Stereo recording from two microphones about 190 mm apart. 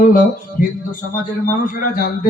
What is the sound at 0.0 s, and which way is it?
Speech, 45° left (ahead or behind).